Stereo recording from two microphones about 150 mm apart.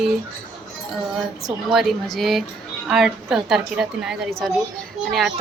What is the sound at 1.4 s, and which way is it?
A woman's voice, centre (ahead or behind).